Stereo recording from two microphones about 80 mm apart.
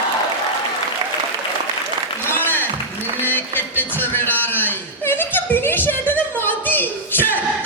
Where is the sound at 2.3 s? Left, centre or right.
Left.